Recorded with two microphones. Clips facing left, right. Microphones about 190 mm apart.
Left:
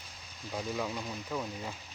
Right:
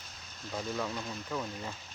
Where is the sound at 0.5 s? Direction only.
10° left (ahead or behind).